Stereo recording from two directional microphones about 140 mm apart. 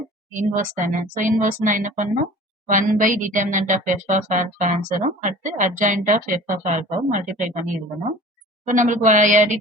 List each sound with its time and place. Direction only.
0.3 s a woman's voice: 70° right (ahead or behind)
8.6 s speech: 65° right (ahead or behind)